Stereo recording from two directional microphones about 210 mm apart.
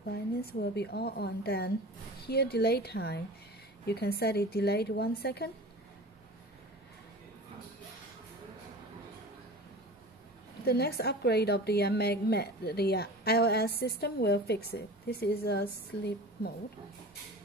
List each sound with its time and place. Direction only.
0.4 s a woman's voice: 50° left (ahead or behind)
10.6 s a woman's voice: 50° left (ahead or behind)